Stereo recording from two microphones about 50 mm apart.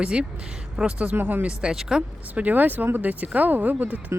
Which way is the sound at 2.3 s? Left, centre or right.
Right.